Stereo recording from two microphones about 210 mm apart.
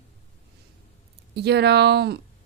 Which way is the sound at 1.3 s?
50° right (ahead or behind).